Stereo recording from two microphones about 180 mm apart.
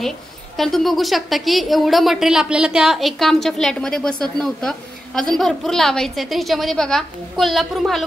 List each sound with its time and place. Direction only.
0.6 s a woman's voice: centre (ahead or behind)